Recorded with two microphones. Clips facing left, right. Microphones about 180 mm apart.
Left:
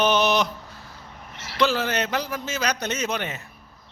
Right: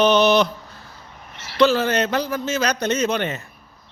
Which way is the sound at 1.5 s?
10° left (ahead or behind).